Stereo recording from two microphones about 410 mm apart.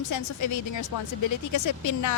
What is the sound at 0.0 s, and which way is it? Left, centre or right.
A woman's voice, left.